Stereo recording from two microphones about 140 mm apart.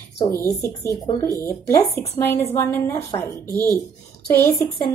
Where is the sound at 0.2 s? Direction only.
30° left (ahead or behind).